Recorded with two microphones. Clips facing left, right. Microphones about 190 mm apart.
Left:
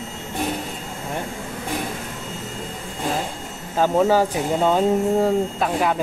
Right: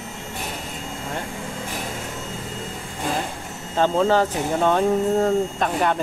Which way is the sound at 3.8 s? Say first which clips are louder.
Left 1 dB; 10° left (ahead or behind).